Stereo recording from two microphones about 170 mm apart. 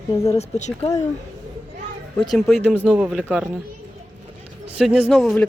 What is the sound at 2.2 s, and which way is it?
Speech, centre (ahead or behind).